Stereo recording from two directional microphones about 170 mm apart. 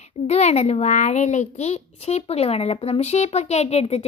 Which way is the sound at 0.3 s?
40° left (ahead or behind).